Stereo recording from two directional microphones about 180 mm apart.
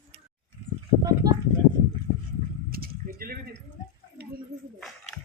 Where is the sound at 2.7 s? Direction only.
55° right (ahead or behind).